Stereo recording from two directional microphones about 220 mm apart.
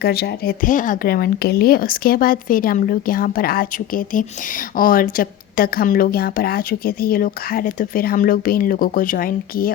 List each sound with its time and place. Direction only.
0.0 s speech: 45° left (ahead or behind)